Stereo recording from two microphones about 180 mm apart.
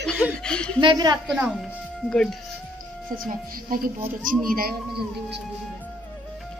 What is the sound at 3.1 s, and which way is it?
Speech, 50° right (ahead or behind).